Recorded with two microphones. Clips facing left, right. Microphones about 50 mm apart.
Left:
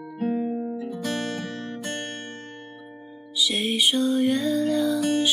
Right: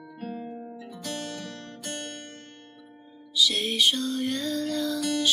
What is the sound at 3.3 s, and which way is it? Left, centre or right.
Music, centre.